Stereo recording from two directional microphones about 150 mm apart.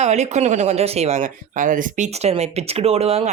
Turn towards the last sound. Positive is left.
turn(degrees=-40)  # may be behind; listen again after turning